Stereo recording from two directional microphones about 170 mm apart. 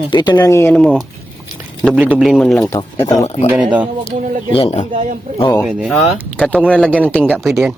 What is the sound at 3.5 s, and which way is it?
Speech, 10° right (ahead or behind).